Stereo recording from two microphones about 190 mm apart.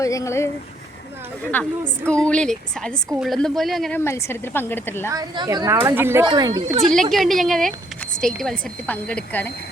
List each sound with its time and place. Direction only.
0.0 s a woman's voice: 15° left (ahead or behind)
1.5 s a woman's voice: 10° left (ahead or behind)
4.0 s a woman's voice: 15° left (ahead or behind)
5.0 s speech: 20° right (ahead or behind)
6.9 s a woman's voice: centre (ahead or behind)